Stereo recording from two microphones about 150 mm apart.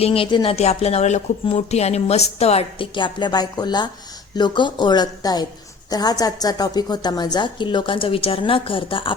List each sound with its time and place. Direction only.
0.0 s a woman's voice: 40° left (ahead or behind)
0.5 s a woman's voice: 45° left (ahead or behind)